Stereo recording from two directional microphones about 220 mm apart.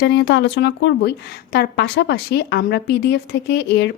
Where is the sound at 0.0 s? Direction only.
50° left (ahead or behind).